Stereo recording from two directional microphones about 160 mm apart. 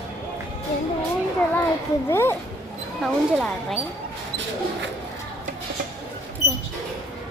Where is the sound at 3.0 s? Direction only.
Centre (ahead or behind).